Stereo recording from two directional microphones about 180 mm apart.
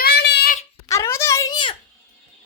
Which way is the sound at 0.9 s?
15° left (ahead or behind).